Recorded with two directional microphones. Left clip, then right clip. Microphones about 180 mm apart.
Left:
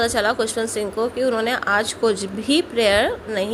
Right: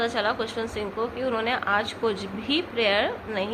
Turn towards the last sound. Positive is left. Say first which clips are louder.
# left 5 dB
turn(degrees=40)  # may be behind; listen again after turning